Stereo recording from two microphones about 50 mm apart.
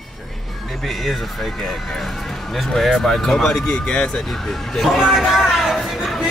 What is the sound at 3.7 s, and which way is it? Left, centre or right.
Speech, left.